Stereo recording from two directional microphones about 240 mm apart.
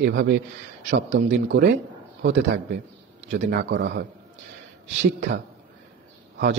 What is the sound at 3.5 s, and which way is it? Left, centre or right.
Speech, right.